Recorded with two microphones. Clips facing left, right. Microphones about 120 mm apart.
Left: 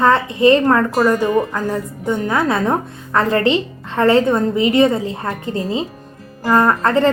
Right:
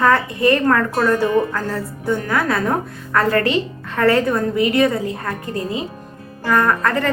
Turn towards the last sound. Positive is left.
turn(degrees=25)  # may be behind; listen again after turning